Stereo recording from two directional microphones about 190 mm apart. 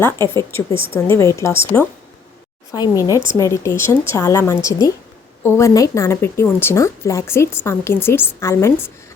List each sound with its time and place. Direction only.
0.7 s a woman's voice: 25° right (ahead or behind)
1.1 s speech: 15° left (ahead or behind)